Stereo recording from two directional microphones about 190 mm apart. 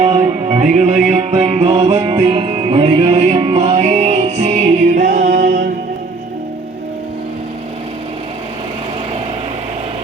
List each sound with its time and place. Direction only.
0.0 s music: 40° right (ahead or behind)
5.0 s music: 75° right (ahead or behind)